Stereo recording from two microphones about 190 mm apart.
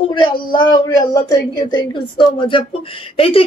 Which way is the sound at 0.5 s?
25° left (ahead or behind).